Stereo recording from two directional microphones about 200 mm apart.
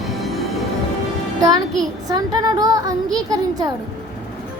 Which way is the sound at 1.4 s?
20° right (ahead or behind).